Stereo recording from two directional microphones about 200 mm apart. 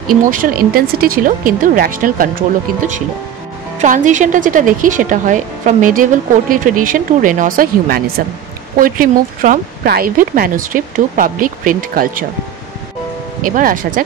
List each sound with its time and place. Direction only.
0.2 s a woman's voice: 45° right (ahead or behind)
13.5 s speech: 45° right (ahead or behind)